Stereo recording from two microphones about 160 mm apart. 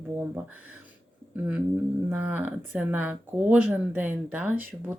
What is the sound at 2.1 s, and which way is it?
Speech, 10° right (ahead or behind).